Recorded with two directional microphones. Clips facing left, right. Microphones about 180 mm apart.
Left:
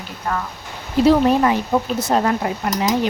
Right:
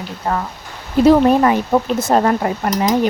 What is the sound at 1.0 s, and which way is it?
Speech, 50° right (ahead or behind).